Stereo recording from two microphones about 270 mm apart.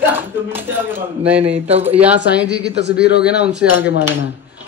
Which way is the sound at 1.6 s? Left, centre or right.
Right.